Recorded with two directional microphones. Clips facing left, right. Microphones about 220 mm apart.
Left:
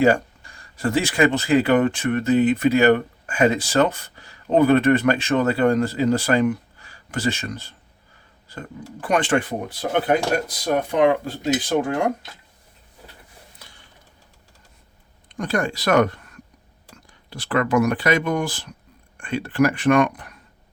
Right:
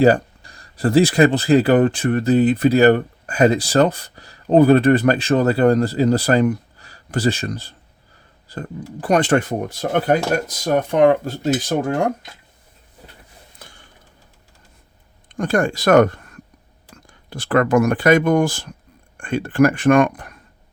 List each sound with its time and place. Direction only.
0.0 s speech: 35° right (ahead or behind)
13.6 s a sound: 50° right (ahead or behind)
15.4 s speech: 50° right (ahead or behind)